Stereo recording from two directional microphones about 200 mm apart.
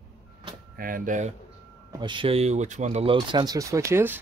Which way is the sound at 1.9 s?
25° right (ahead or behind).